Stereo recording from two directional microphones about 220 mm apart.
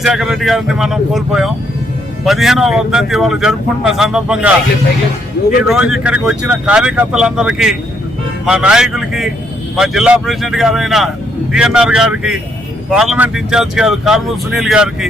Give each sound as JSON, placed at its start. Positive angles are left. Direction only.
{"t": 0.0, "sound": "speech", "side_deg": 0}
{"t": 5.6, "sound": "speech", "side_deg": -5}